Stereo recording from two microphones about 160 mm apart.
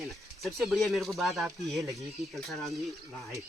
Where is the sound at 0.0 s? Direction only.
Centre (ahead or behind).